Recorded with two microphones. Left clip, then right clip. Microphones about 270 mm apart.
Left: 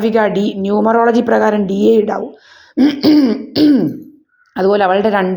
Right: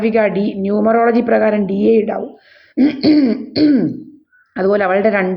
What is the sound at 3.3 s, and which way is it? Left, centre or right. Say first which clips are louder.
A woman's voice: left 2 dB; centre.